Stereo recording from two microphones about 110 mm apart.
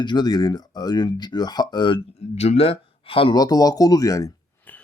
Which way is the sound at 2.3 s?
65° left (ahead or behind).